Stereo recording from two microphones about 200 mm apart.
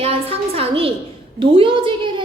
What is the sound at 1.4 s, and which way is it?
Speech, 25° right (ahead or behind).